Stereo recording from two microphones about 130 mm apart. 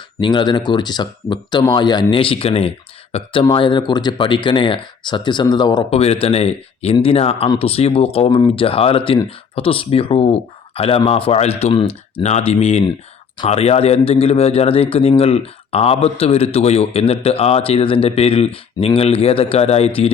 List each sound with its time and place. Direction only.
0.2 s speech: 35° left (ahead or behind)
3.5 s speech: 40° left (ahead or behind)
5.9 s speech: 50° left (ahead or behind)